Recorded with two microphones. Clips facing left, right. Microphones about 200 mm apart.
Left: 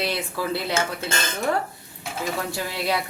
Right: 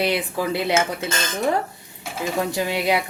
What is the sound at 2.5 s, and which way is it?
Speech, 15° right (ahead or behind).